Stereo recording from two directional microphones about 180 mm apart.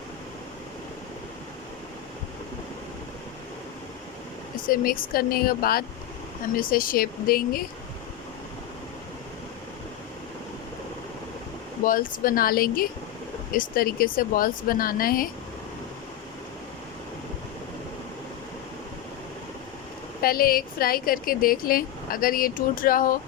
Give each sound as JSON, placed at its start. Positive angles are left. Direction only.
{"t": 4.6, "sound": "speech", "side_deg": 50}
{"t": 11.9, "sound": "speech", "side_deg": 50}
{"t": 20.2, "sound": "speech", "side_deg": 55}